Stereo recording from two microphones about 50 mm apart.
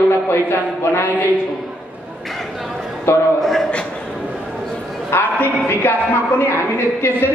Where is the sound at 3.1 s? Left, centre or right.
Left.